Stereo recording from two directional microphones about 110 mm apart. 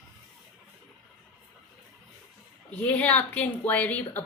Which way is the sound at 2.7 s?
15° left (ahead or behind).